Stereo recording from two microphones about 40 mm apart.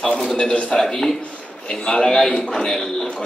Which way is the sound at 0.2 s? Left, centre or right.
Left.